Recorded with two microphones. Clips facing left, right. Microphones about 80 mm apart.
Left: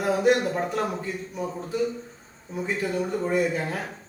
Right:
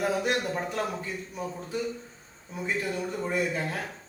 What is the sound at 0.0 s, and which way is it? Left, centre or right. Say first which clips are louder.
A man's voice: left 6 dB; centre.